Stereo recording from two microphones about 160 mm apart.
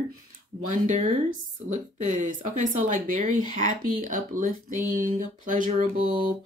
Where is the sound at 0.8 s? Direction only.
45° right (ahead or behind).